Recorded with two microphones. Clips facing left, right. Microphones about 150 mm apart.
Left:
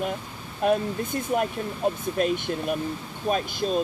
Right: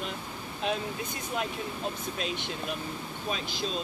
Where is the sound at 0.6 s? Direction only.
50° left (ahead or behind).